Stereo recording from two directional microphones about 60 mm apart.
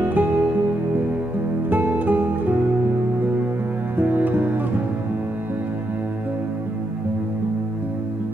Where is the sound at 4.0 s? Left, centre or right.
Right.